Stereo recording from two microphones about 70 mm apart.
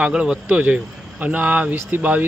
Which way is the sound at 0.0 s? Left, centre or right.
Centre.